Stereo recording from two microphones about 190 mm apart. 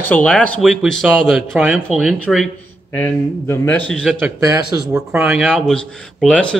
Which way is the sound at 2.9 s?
10° left (ahead or behind).